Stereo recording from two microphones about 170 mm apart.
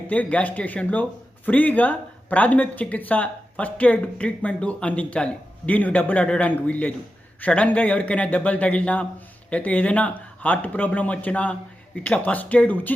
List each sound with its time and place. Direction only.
0.1 s speech: 10° left (ahead or behind)